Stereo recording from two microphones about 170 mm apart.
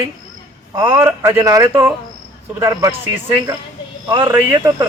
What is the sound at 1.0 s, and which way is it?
Speech, 15° right (ahead or behind).